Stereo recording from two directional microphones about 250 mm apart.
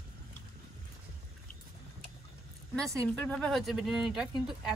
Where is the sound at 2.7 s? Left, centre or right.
Centre.